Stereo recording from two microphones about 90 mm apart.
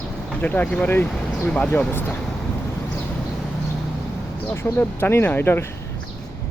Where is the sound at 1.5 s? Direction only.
15° left (ahead or behind).